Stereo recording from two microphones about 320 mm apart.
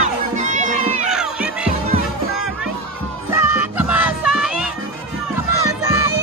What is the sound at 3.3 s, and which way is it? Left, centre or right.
Music, centre.